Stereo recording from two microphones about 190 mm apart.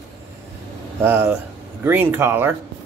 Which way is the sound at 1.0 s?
10° right (ahead or behind).